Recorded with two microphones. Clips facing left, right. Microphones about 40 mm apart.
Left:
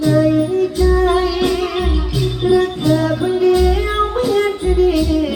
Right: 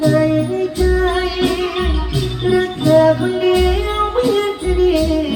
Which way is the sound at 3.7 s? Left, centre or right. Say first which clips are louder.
Even; right.